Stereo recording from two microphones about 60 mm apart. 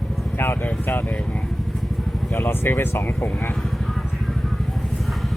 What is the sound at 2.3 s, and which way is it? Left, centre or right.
Speech, left.